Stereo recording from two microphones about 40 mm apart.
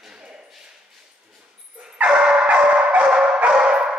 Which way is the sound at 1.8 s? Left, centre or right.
Right.